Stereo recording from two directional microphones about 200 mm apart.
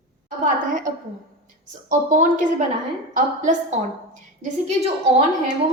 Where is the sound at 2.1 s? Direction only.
40° right (ahead or behind).